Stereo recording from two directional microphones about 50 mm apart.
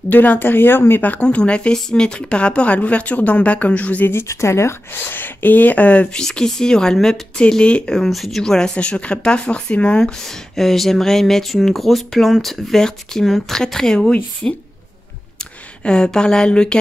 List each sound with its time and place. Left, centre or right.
0.1 s speech: left
1.2 s a woman's voice: left
4.0 s speech: left
4.3 s speech: left
4.9 s a woman's voice: left; by 8.1 s centre
8.1 s a woman's voice: centre; by 10.0 s left
10.0 s speech: centre
15.8 s speech: centre